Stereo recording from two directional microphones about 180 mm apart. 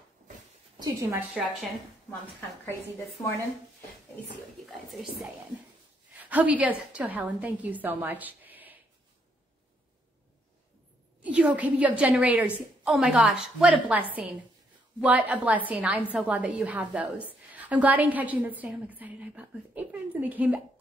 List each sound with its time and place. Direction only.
0.7 s a woman's voice: 20° right (ahead or behind)
1.3 s a woman's voice: 10° right (ahead or behind)
4.6 s a woman's voice: centre (ahead or behind)
11.2 s a woman's voice: 10° right (ahead or behind)